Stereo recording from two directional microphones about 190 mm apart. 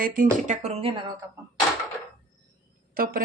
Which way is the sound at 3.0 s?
50° right (ahead or behind).